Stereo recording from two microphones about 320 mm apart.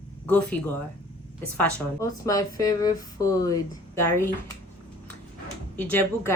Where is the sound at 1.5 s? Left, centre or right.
Centre.